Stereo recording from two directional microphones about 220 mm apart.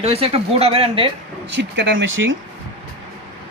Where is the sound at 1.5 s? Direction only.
50° right (ahead or behind).